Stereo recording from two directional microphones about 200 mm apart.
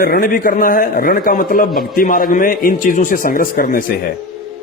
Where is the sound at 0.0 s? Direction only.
45° left (ahead or behind).